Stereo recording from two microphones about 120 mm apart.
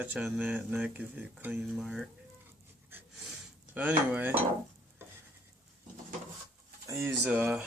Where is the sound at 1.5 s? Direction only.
Centre (ahead or behind).